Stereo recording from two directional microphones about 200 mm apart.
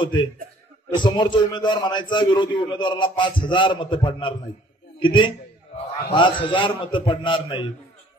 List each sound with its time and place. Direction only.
0.0 s a man's voice: 25° left (ahead or behind)